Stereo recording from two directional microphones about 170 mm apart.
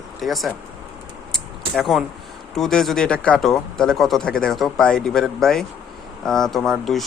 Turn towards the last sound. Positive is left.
turn(degrees=0)  # may be behind; listen again after turning